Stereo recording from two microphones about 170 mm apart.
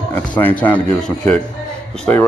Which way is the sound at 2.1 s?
10° left (ahead or behind).